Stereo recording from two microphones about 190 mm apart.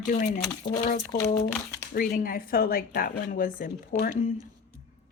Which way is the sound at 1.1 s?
15° left (ahead or behind).